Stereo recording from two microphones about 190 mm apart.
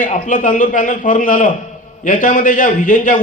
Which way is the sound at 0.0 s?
40° left (ahead or behind).